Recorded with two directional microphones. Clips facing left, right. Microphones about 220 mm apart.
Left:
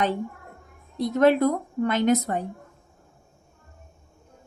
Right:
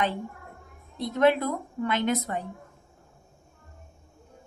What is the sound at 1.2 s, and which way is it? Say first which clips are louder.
A woman's voice: left 3 dB; 45° left (ahead or behind).